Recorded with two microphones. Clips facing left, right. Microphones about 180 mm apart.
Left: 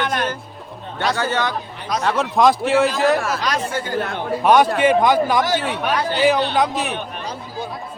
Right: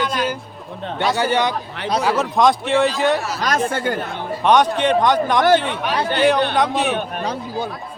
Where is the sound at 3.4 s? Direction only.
50° right (ahead or behind).